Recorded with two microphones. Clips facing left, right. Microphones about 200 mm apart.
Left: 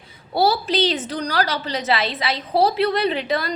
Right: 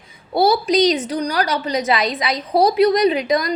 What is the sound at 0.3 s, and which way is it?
Speech, 35° left (ahead or behind).